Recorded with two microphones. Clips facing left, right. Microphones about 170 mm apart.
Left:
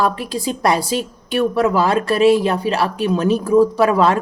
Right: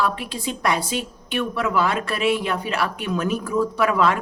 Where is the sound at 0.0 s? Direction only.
40° left (ahead or behind).